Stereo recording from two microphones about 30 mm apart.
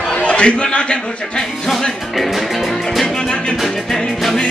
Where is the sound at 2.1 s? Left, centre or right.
Centre.